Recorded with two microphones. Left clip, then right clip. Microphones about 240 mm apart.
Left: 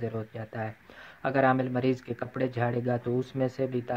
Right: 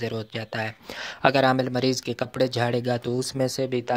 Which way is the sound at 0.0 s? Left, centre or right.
Right.